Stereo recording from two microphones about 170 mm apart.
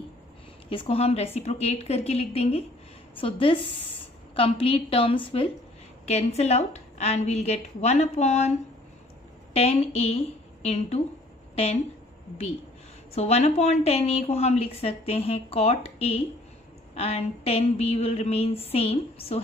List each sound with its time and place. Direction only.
0.7 s a woman's voice: 35° left (ahead or behind)
13.1 s a woman's voice: 40° left (ahead or behind)